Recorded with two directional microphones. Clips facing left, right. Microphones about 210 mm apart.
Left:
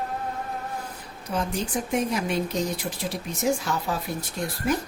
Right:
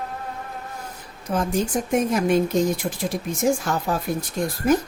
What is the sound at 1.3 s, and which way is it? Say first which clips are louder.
Speech: right 5 dB; 45° right (ahead or behind).